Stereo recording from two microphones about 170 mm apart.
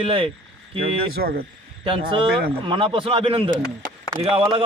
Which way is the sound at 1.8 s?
30° right (ahead or behind).